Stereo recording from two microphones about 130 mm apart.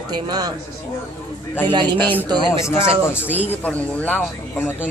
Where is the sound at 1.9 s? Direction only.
15° left (ahead or behind).